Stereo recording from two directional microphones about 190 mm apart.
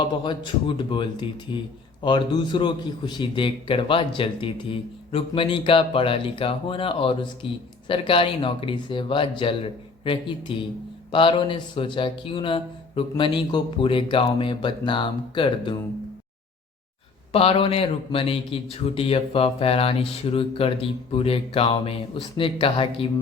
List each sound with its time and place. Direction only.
0.0 s a man's voice: 25° left (ahead or behind)
17.3 s a man's voice: 30° left (ahead or behind)